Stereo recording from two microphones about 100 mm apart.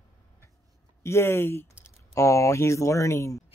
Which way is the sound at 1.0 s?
25° left (ahead or behind).